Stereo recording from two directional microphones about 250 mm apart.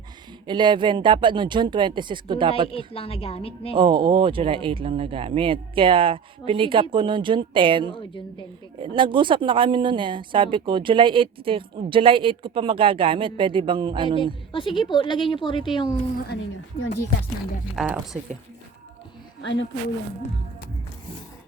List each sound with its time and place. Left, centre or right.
0.4 s speech: centre
2.7 s speech: left
3.8 s speech: centre
14.5 s speech: centre
17.7 s speech: centre
19.4 s speech: left